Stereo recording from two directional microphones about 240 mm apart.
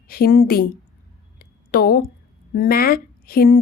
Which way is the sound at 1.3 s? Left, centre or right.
Left.